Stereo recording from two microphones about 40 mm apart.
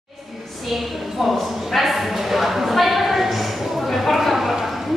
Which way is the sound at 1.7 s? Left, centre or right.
Centre.